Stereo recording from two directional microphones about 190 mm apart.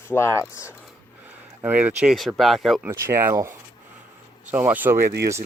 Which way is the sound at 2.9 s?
15° right (ahead or behind).